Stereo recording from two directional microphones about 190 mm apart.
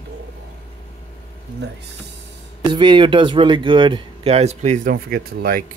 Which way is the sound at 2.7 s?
25° right (ahead or behind).